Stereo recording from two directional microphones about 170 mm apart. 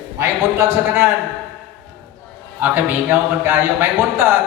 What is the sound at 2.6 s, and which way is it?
Speech, 10° right (ahead or behind).